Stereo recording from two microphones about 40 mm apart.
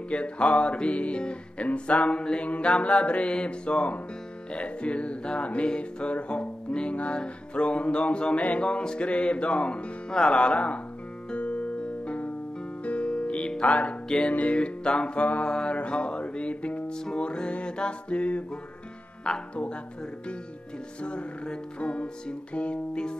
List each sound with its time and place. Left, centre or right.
0.1 s music: left
14.0 s music: centre
14.3 s music: left
19.2 s speech: left
21.0 s music: left